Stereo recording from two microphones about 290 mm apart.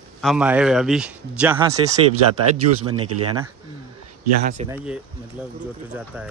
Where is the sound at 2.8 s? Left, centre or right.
Right.